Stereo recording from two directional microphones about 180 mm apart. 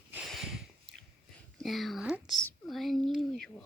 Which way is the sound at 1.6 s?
Centre (ahead or behind).